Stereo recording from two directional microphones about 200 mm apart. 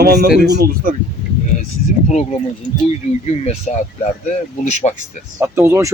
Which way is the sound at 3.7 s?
35° left (ahead or behind).